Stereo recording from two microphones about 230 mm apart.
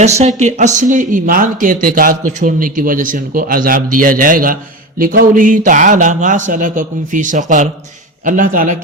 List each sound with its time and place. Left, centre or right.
0.0 s speech: right